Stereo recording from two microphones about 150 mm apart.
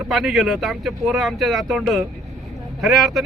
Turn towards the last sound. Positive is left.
turn(degrees=0)  # may be behind; listen again after turning